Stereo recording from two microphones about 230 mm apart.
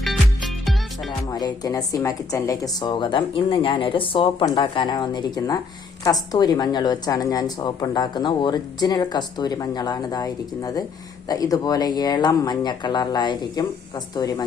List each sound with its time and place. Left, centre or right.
0.0 s music: centre
1.3 s a woman's voice: centre